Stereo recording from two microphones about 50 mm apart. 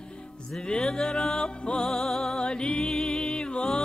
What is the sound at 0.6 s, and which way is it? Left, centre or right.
Music, centre.